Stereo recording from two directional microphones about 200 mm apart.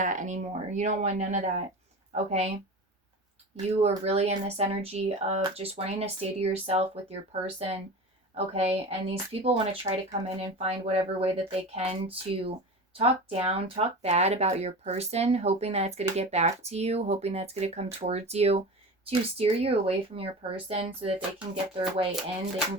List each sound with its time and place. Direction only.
0.0 s speech: 40° right (ahead or behind)
3.8 s speech: 30° right (ahead or behind)